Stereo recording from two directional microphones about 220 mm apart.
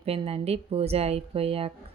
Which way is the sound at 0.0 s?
25° right (ahead or behind).